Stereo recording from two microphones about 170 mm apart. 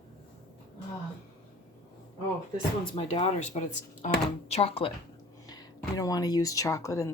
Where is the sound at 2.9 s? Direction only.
35° left (ahead or behind).